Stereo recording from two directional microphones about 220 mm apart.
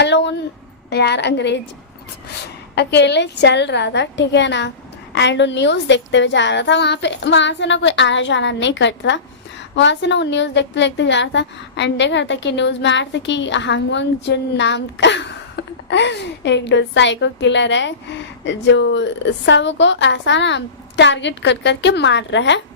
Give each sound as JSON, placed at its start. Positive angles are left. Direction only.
{"t": 0.0, "sound": "a woman's voice", "side_deg": 50}
{"t": 2.7, "sound": "a woman's voice", "side_deg": 50}